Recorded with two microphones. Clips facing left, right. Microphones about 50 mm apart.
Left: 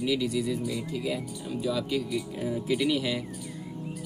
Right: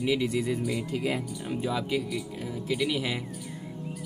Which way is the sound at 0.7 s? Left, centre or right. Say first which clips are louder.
Right 2 dB; right.